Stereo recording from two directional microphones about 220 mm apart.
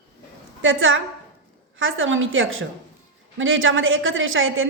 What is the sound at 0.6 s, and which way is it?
A woman's voice, 60° right (ahead or behind).